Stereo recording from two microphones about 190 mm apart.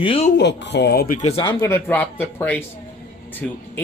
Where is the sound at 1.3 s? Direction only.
25° left (ahead or behind).